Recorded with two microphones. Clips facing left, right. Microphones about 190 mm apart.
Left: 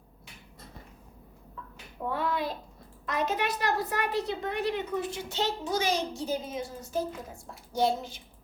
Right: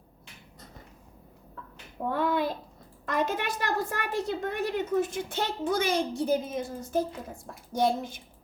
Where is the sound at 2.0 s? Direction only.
50° right (ahead or behind).